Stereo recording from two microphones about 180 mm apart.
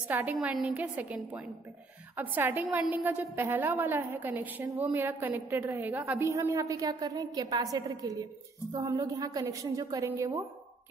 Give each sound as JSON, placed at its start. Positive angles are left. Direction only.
{"t": 0.1, "sound": "a woman's voice", "side_deg": -10}